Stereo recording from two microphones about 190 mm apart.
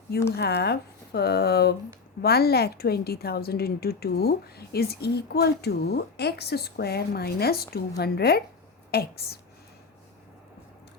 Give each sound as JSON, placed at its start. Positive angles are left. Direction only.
{"t": 0.3, "sound": "a woman's voice", "side_deg": 60}